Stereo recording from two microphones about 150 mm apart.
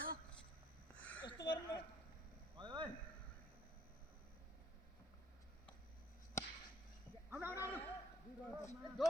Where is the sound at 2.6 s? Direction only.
30° right (ahead or behind).